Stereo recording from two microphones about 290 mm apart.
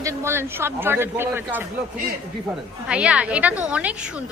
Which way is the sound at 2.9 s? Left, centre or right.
Centre.